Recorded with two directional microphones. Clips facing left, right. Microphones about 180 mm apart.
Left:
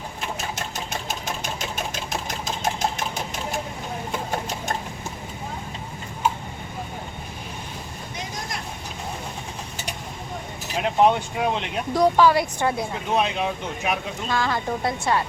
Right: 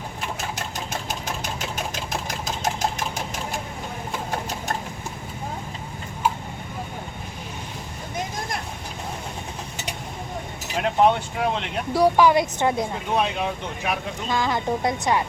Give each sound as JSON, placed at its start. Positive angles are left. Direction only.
{"t": 10.8, "sound": "speech", "side_deg": 0}
{"t": 11.9, "sound": "a woman's voice", "side_deg": -10}
{"t": 13.1, "sound": "speech", "side_deg": 0}
{"t": 14.3, "sound": "a woman's voice", "side_deg": -15}